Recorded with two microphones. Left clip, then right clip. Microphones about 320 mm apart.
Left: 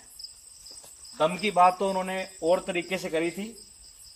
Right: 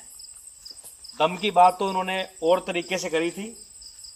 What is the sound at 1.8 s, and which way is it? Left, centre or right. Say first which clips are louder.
Cricket: right 2 dB; right.